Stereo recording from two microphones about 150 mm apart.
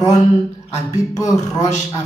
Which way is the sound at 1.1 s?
20° left (ahead or behind).